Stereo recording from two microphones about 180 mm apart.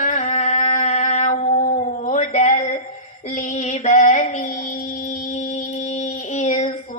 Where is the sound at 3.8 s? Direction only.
40° left (ahead or behind).